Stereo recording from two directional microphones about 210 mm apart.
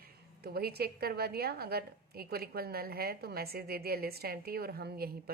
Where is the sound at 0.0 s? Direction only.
45° right (ahead or behind).